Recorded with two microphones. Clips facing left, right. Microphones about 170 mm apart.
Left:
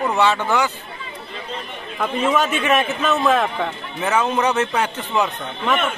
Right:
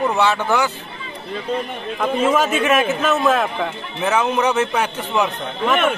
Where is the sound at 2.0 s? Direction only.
Centre (ahead or behind).